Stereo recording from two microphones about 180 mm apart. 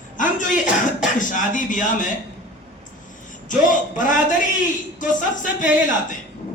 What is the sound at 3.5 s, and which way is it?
Speech, 45° left (ahead or behind).